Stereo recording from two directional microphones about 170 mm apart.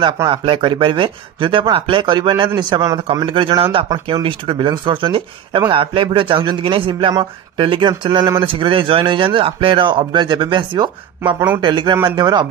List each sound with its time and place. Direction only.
0.0 s a man's voice: 30° right (ahead or behind)
3.0 s a man's voice: 30° right (ahead or behind)